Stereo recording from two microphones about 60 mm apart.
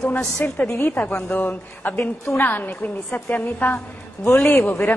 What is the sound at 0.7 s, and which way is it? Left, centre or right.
Speech, left.